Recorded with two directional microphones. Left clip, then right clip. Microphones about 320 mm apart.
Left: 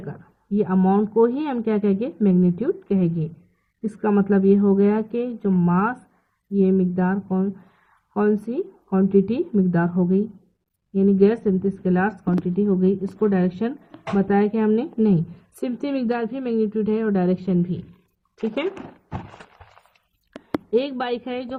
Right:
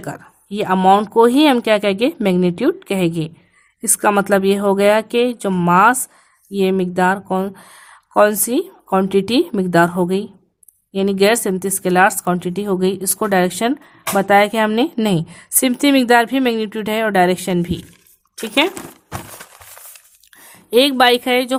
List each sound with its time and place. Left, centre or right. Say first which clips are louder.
0.0 s speech: right 9 dB; right
20.7 s speech: right 12 dB; right